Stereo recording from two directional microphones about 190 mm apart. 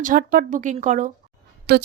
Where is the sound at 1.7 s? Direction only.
60° right (ahead or behind).